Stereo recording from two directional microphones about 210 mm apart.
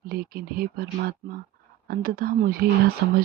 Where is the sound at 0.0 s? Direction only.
45° right (ahead or behind).